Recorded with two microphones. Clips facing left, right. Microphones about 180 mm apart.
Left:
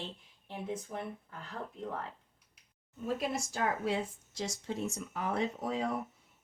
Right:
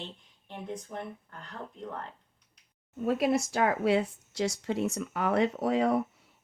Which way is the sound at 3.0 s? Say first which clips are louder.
Right 8 dB; 70° right (ahead or behind).